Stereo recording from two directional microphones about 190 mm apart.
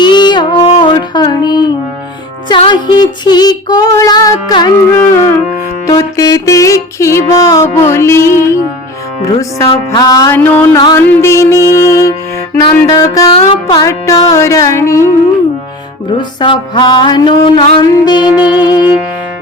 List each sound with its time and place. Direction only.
0.0 s music: 25° left (ahead or behind)
5.8 s music: 20° left (ahead or behind)
9.6 s music: 20° left (ahead or behind)
16.1 s music: 25° left (ahead or behind)